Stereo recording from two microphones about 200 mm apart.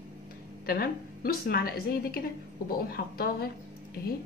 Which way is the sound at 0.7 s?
50° left (ahead or behind).